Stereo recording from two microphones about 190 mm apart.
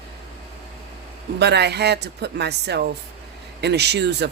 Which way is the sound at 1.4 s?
60° right (ahead or behind).